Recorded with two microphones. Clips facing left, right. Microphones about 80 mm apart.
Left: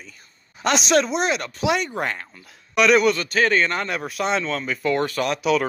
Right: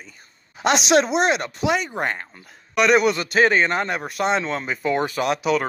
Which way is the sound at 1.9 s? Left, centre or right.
Centre.